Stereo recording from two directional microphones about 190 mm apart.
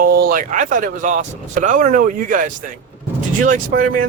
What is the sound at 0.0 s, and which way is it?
Speech, 50° right (ahead or behind).